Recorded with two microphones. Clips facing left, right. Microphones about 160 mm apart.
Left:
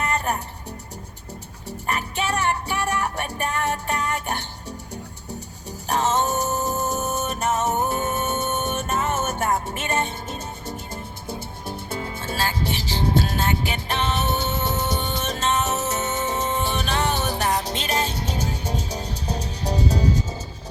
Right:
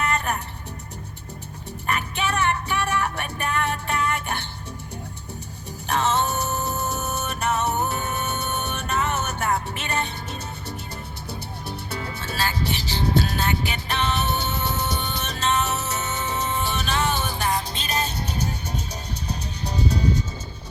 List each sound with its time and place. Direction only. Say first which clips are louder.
1.9 s music: even; 40° left (ahead or behind)
5.9 s music: left 1 dB; 45° left (ahead or behind)
17.2 s music: left 2 dB; 65° left (ahead or behind); by 19.7 s 90° left